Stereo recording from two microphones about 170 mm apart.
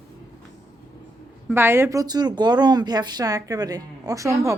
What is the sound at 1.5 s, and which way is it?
Speech, 15° right (ahead or behind).